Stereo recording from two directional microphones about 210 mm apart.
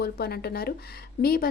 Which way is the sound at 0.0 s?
50° left (ahead or behind).